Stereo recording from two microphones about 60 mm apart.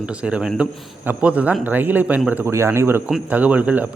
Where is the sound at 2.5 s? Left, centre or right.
Right.